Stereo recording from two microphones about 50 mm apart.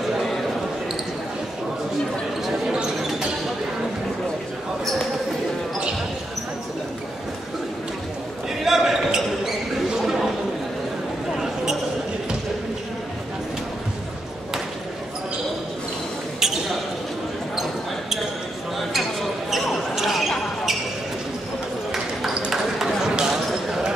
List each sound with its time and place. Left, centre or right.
2.7 s basketball bounce: centre
8.6 s basketball bounce: centre
11.3 s basketball bounce: centre
18.8 s basketball bounce: centre
22.5 s a sound: centre
23.1 s basketball bounce: centre